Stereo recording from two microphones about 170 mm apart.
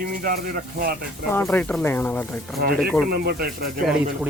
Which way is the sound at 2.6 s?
65° right (ahead or behind).